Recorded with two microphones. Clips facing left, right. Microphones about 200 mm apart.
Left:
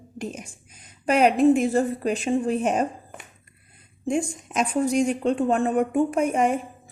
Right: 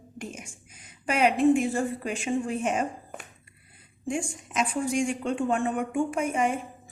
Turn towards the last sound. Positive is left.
turn(degrees=40)  # may be behind; listen again after turning